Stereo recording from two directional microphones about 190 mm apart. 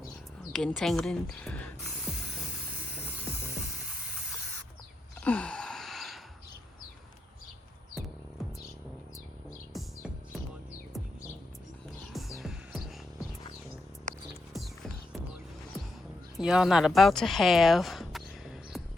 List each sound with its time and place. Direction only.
0.5 s a woman's voice: 5° left (ahead or behind)
2.9 s music: 5° right (ahead or behind)
5.2 s a sound: 5° left (ahead or behind)
9.7 s music: centre (ahead or behind)
12.1 s music: centre (ahead or behind)
16.4 s a sound: 5° right (ahead or behind)